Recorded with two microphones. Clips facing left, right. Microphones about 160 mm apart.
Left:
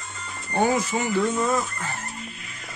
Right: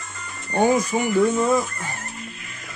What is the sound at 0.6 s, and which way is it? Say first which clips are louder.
Speech: right 3 dB; 15° right (ahead or behind).